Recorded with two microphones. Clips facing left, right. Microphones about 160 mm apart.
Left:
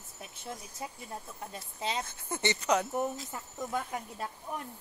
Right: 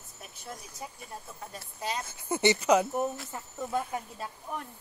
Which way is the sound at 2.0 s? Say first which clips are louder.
Right 7 dB; 10° right (ahead or behind).